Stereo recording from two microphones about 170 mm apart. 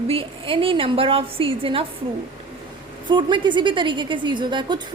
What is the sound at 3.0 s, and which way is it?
A woman's voice, 25° right (ahead or behind).